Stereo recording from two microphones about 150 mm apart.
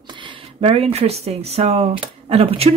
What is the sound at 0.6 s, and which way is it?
Speech, 40° right (ahead or behind).